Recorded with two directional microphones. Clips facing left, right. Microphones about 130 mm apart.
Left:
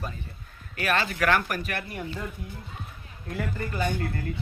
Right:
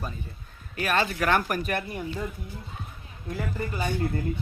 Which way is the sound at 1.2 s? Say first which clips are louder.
Even; 25° right (ahead or behind).